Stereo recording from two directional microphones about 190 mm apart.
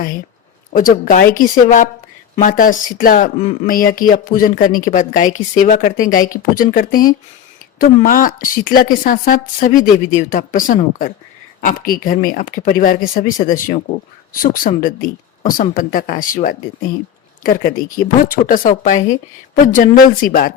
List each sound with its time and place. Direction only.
0.7 s a woman's voice: 45° left (ahead or behind)
3.3 s speech: 30° left (ahead or behind)
3.7 s a woman's voice: 50° left (ahead or behind)
15.7 s a woman's voice: 45° left (ahead or behind)